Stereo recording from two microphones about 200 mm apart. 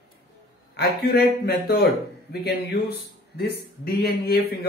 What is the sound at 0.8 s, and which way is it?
Speech, 50° left (ahead or behind).